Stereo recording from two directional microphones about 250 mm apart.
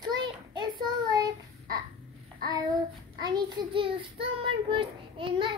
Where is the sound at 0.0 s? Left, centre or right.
Centre.